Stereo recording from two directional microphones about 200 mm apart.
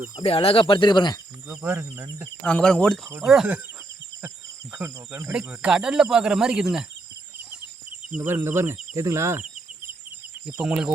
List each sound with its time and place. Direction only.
0.2 s speech: 30° left (ahead or behind)
1.5 s speech: 10° right (ahead or behind)
2.4 s speech: 5° left (ahead or behind)
4.7 s speech: 10° right (ahead or behind)
8.1 s speech: 10° right (ahead or behind)